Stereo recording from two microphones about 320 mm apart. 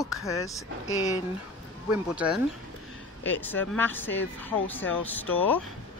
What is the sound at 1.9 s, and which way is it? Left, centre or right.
Speech, centre.